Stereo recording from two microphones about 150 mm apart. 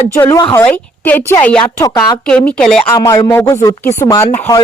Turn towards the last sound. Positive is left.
turn(degrees=20)  # may be behind; listen again after turning